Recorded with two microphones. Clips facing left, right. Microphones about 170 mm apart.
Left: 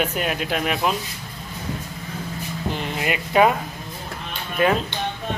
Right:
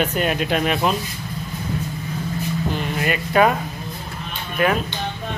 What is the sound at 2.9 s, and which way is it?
Speech, 15° left (ahead or behind).